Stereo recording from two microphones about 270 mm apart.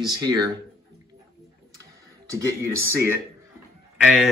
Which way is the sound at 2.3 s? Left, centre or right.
Centre.